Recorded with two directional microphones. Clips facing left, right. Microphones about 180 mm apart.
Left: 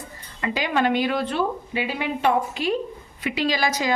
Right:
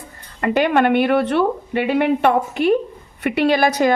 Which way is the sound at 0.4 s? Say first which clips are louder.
Right 7 dB; 60° right (ahead or behind).